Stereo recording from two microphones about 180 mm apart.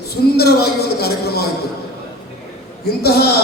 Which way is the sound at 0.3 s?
60° left (ahead or behind).